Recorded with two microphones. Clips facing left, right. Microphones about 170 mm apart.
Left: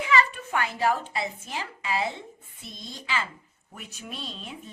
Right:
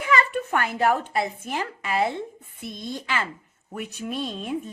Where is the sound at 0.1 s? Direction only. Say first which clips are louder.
Right 3 dB; 55° right (ahead or behind).